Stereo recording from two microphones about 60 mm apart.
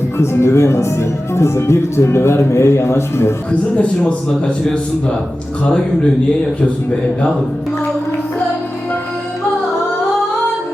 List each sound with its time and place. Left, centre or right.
0.2 s speech: left
3.5 s a man's voice: centre